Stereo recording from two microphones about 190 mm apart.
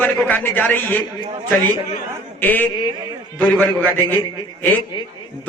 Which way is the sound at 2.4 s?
10° left (ahead or behind).